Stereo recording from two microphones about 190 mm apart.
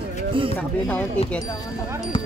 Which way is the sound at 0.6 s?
10° left (ahead or behind).